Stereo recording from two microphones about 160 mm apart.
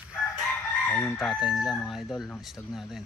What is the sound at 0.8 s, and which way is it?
Chicken, 5° left (ahead or behind).